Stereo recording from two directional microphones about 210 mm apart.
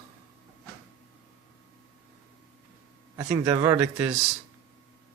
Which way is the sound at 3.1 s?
15° right (ahead or behind).